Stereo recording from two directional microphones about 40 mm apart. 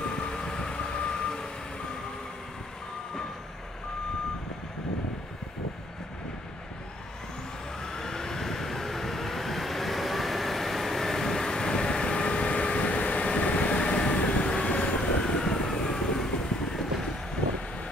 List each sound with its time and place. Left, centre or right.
0.0 s train: left
7.8 s vehicle: centre